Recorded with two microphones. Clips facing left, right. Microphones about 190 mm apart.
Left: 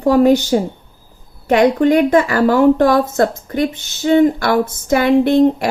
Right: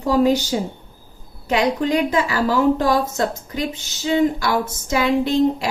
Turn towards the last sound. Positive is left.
turn(degrees=55)  # may be behind; listen again after turning